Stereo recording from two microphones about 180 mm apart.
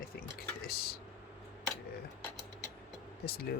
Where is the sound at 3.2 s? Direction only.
60° left (ahead or behind).